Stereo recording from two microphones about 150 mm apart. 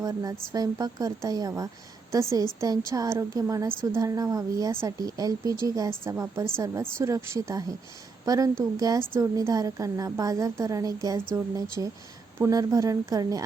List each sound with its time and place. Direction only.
0.0 s a woman's voice: 25° right (ahead or behind)